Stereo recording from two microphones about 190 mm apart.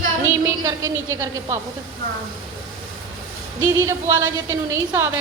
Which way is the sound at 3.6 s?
15° right (ahead or behind).